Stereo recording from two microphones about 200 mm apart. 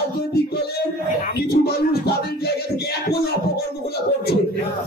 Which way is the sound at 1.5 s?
50° left (ahead or behind).